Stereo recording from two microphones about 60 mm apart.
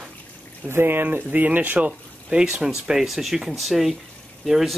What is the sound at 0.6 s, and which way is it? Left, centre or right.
Speech, right.